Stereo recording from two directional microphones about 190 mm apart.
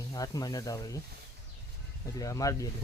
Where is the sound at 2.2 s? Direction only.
20° left (ahead or behind).